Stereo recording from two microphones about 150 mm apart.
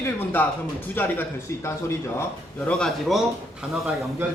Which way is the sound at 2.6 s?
5° left (ahead or behind).